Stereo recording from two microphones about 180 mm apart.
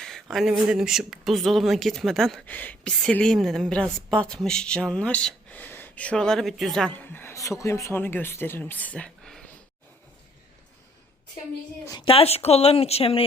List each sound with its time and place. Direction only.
0.0 s a woman's voice: centre (ahead or behind)
11.9 s a woman's voice: 25° left (ahead or behind)